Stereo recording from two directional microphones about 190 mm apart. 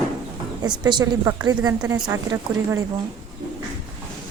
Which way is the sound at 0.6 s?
20° right (ahead or behind).